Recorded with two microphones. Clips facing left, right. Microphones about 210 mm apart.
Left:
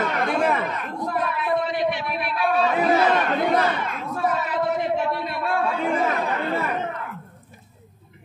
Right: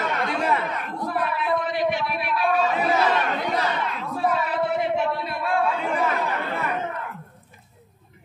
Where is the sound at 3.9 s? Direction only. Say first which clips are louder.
Even; 45° left (ahead or behind).